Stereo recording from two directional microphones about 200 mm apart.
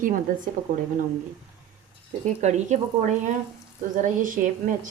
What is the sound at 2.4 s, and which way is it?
Speech, 35° right (ahead or behind).